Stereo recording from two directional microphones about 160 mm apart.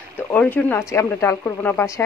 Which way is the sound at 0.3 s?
10° left (ahead or behind).